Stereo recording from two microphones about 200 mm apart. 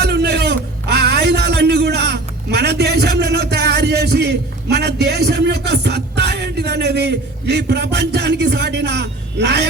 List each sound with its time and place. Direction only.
0.0 s music: 55° right (ahead or behind)